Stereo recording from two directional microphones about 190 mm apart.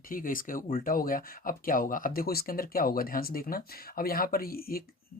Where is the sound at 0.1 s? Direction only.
45° left (ahead or behind).